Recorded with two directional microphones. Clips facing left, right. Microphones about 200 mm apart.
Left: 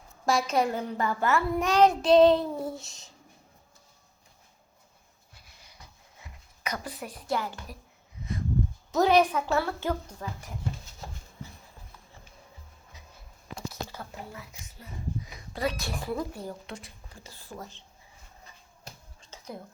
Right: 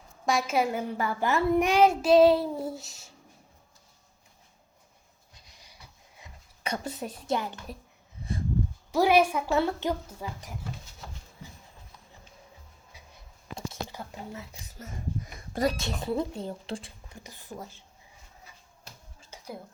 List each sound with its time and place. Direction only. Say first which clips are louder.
0.3 s a child's voice: left 1 dB; 5° right (ahead or behind)
5.3 s wheeze: even; 15° right (ahead or behind)
6.6 s speech: right 3 dB; 25° right (ahead or behind)
8.9 s a child's voice: even; 10° right (ahead or behind)
13.9 s whispering: right 2 dB; 15° right (ahead or behind)
14.8 s a sound: right 1 dB; 45° right (ahead or behind)
15.8 s speech: right 3 dB; 25° right (ahead or behind)
17.2 s a child's voice: right 1 dB; 20° right (ahead or behind)
19.2 s music: even; 10° right (ahead or behind)